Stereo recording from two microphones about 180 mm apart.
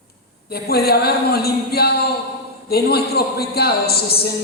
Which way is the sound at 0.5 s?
60° left (ahead or behind).